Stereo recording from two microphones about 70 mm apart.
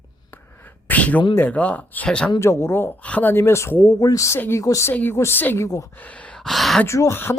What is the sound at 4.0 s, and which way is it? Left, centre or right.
Speech, left.